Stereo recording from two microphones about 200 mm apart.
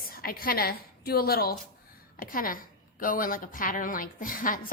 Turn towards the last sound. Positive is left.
turn(degrees=45)  # may be behind; listen again after turning